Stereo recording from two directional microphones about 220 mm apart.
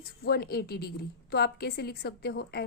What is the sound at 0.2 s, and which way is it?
A woman's voice, 45° left (ahead or behind).